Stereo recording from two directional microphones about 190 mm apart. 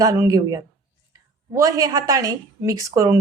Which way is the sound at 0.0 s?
15° right (ahead or behind).